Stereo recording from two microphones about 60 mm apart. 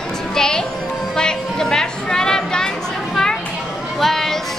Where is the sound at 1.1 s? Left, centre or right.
Centre.